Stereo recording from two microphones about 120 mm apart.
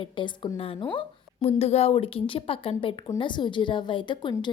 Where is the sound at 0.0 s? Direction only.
45° left (ahead or behind).